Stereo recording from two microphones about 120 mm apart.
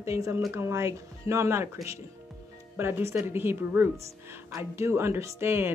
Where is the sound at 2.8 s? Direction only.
20° right (ahead or behind).